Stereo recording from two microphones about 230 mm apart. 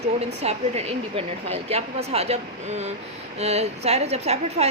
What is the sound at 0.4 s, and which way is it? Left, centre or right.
A woman's voice, right.